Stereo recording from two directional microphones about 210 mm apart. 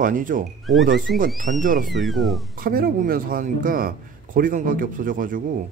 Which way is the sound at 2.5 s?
45° right (ahead or behind).